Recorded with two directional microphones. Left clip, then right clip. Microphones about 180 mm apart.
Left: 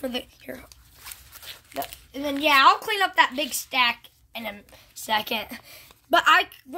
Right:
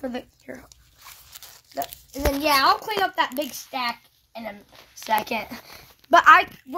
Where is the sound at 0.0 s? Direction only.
30° left (ahead or behind).